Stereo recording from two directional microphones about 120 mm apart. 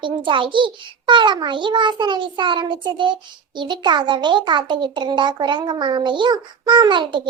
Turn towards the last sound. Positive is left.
turn(degrees=-40)  # may be behind; listen again after turning